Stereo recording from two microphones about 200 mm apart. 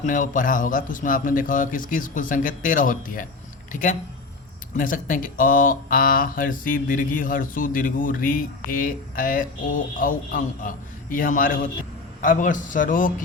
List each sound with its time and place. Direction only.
0.0 s a man's voice: 40° left (ahead or behind)